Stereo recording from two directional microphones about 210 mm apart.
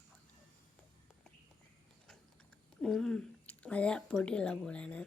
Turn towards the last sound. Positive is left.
turn(degrees=5)  # may be behind; listen again after turning